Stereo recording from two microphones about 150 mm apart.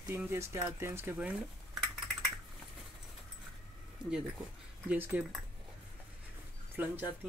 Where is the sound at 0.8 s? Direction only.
15° right (ahead or behind).